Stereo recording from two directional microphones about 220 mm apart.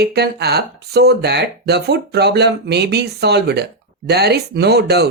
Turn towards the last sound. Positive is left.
turn(degrees=-50)  # may be behind; listen again after turning